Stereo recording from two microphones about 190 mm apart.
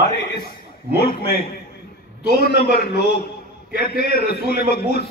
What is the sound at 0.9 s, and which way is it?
A man's voice, 55° left (ahead or behind).